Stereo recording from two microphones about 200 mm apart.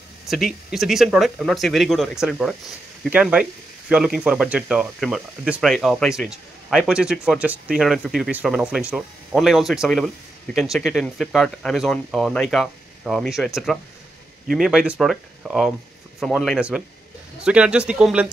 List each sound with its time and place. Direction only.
0.3 s speech: centre (ahead or behind)